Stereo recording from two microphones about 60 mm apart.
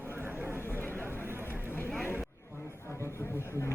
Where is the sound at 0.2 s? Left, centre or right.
Right.